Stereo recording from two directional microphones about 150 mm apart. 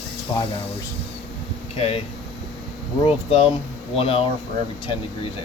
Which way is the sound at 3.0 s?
35° left (ahead or behind).